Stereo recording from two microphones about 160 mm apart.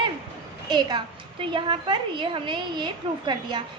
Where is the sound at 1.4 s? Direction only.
30° right (ahead or behind).